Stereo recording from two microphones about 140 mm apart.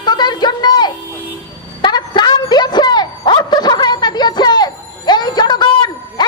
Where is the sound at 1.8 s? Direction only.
30° left (ahead or behind).